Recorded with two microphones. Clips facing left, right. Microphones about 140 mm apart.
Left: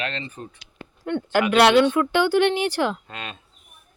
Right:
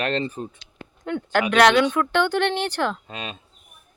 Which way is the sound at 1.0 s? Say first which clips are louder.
Left 1 dB; 5° left (ahead or behind).